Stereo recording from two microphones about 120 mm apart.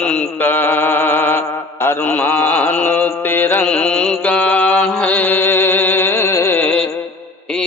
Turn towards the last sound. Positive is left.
turn(degrees=15)  # may be behind; listen again after turning